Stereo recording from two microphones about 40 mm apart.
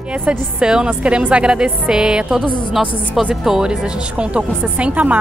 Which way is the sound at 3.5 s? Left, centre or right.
Centre.